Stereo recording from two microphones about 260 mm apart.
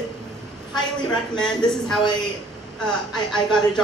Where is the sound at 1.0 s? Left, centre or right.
Centre.